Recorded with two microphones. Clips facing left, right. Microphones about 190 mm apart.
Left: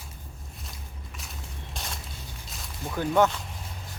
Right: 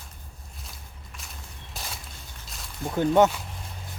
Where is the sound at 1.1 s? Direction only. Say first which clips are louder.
Left 2 dB; centre (ahead or behind).